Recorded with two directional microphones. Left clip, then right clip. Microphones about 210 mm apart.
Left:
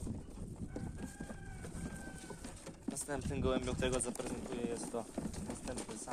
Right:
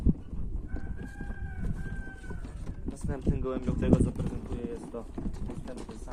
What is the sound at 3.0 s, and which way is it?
Speech, 45° left (ahead or behind).